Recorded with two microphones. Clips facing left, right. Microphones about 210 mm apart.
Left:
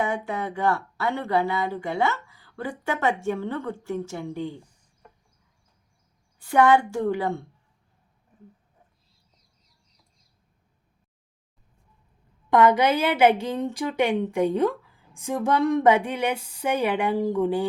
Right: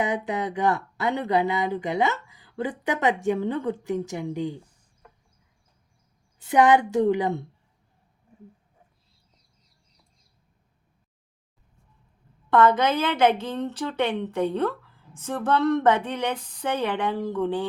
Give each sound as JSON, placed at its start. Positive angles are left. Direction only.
{"t": 0.0, "sound": "speech", "side_deg": -15}
{"t": 6.4, "sound": "a woman's voice", "side_deg": -20}
{"t": 12.5, "sound": "a woman's voice", "side_deg": 15}